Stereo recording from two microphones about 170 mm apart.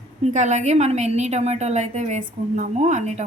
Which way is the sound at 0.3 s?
45° right (ahead or behind).